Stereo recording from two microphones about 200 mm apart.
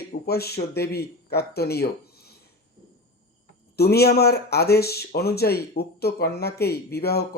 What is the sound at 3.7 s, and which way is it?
Speech, 50° left (ahead or behind).